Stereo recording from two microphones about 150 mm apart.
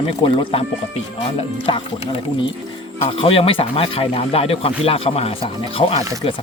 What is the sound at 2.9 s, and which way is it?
Speech, 40° left (ahead or behind).